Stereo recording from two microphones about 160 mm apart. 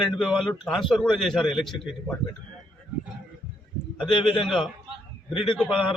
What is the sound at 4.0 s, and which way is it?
A man's voice, centre (ahead or behind).